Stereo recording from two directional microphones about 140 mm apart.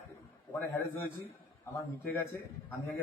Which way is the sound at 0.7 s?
15° left (ahead or behind).